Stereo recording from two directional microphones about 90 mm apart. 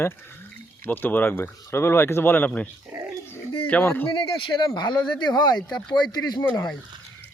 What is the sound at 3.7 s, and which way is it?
Speech, 20° left (ahead or behind).